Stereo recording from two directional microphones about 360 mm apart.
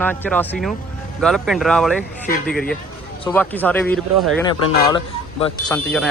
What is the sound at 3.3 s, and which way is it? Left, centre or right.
A man's voice, centre.